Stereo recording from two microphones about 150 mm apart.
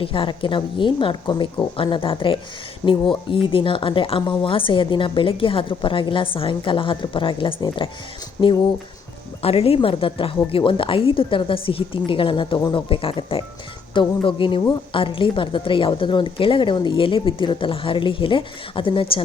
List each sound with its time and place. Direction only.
0.0 s a woman's voice: 35° left (ahead or behind)
9.4 s a woman's voice: 40° left (ahead or behind)